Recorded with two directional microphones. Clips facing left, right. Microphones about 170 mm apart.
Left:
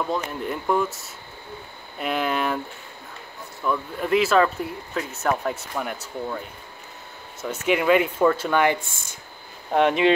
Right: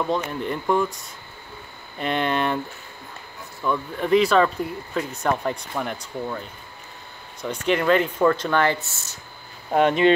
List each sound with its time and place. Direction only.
0.0 s speech: centre (ahead or behind)
3.6 s speech: centre (ahead or behind)
7.4 s speech: 10° left (ahead or behind)
8.8 s speech: 55° left (ahead or behind)
9.7 s speech: centre (ahead or behind)